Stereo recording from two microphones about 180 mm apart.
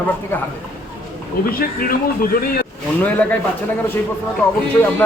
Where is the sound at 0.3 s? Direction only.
10° left (ahead or behind).